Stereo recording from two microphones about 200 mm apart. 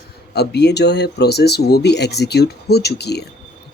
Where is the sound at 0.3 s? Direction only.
55° left (ahead or behind).